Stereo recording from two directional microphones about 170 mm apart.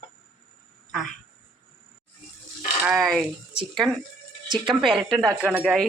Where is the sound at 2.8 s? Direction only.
Centre (ahead or behind).